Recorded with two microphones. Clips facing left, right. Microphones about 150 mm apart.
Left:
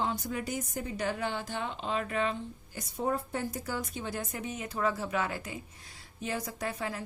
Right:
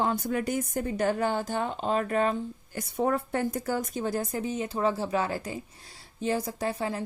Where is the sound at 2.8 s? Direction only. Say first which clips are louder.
Right 5 dB; 65° right (ahead or behind).